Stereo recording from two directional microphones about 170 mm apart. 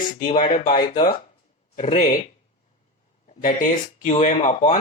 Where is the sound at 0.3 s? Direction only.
30° left (ahead or behind).